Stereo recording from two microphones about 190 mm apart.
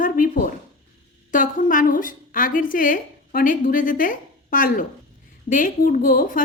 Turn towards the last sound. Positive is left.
turn(degrees=45)  # may be behind; listen again after turning